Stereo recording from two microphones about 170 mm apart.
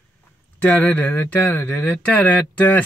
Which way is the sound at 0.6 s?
10° left (ahead or behind).